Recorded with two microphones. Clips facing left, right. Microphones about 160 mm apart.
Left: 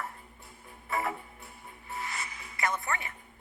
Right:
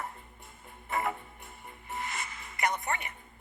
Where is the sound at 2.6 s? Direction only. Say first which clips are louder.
Right 1 dB; 20° right (ahead or behind).